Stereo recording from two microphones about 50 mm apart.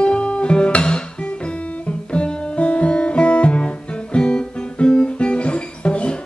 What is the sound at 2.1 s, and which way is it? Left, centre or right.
Music, left.